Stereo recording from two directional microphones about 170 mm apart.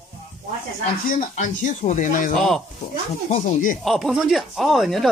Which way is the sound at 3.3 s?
55° left (ahead or behind).